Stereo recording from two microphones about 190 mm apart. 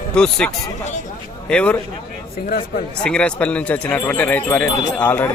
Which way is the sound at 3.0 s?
5° left (ahead or behind).